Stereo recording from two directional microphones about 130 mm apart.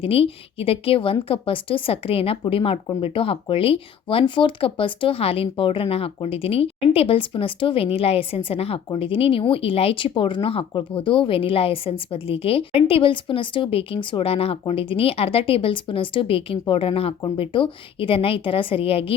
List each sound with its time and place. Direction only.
0.0 s speech: 45° left (ahead or behind)